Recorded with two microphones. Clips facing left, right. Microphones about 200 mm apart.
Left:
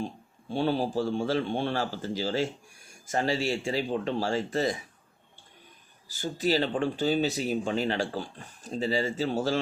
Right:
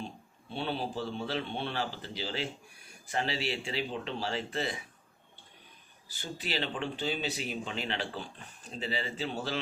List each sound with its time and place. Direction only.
0.5 s speech: 40° left (ahead or behind)
6.1 s speech: 40° left (ahead or behind)